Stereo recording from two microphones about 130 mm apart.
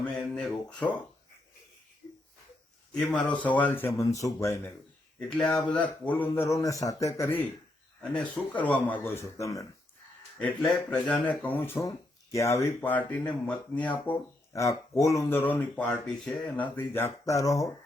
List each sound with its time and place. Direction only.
0.0 s a sound: centre (ahead or behind)
2.9 s a man's voice: 10° left (ahead or behind); by 4.5 s 25° left (ahead or behind)
5.4 s speech: 10° left (ahead or behind)
8.1 s speech: 10° left (ahead or behind)
10.6 s speech: 5° left (ahead or behind)
14.5 s speech: 25° left (ahead or behind)
15.4 s speech: 15° left (ahead or behind)